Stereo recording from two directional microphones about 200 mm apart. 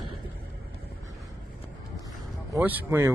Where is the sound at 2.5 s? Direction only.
10° right (ahead or behind).